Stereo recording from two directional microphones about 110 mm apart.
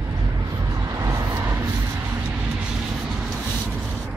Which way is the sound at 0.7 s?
30° right (ahead or behind).